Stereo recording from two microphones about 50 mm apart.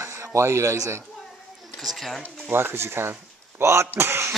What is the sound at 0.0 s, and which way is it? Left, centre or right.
A man's voice, right.